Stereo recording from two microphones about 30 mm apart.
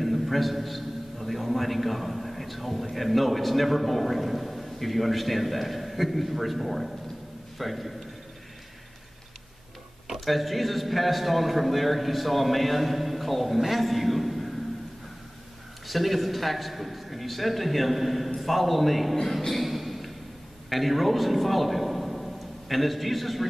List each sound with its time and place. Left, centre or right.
0.0 s a man's voice: centre
10.2 s a man's voice: centre
15.9 s a man's voice: centre